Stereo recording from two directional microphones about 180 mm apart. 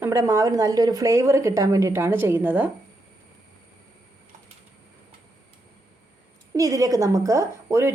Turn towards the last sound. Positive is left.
turn(degrees=-15)  # may be behind; listen again after turning